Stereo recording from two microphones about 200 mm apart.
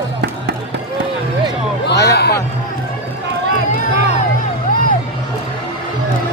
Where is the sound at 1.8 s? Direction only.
55° left (ahead or behind).